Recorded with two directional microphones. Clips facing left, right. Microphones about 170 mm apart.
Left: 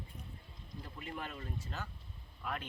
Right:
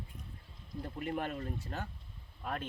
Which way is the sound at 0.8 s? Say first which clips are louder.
Right 8 dB; 50° right (ahead or behind).